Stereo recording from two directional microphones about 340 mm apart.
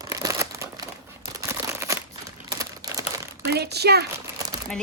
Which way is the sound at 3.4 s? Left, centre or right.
Right.